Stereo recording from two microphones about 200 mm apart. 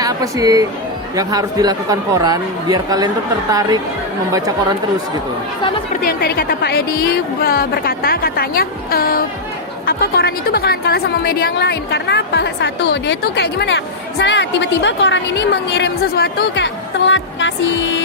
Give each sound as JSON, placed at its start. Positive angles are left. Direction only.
{"t": 0.0, "sound": "speech", "side_deg": -20}
{"t": 5.9, "sound": "a woman's voice", "side_deg": 50}